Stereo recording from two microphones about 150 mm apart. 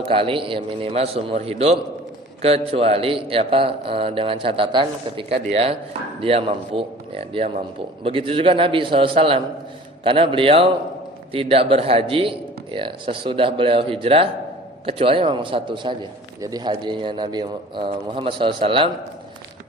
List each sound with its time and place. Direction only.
0.1 s a man's voice: 35° right (ahead or behind)